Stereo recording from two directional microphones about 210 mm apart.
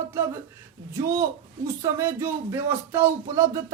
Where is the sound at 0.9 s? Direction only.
15° right (ahead or behind).